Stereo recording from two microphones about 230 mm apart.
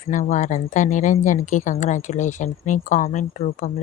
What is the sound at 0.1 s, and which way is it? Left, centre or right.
Speech, left.